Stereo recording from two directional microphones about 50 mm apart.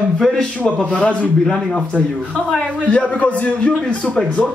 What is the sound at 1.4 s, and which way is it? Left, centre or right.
Speech, centre.